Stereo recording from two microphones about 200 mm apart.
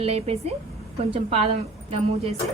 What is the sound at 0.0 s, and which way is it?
A woman's voice, 30° right (ahead or behind).